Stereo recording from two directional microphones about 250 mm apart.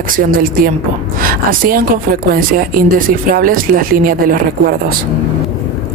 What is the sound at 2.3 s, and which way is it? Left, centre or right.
Speech, right.